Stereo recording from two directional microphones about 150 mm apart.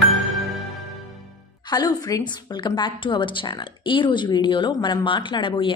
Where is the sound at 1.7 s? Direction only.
25° left (ahead or behind).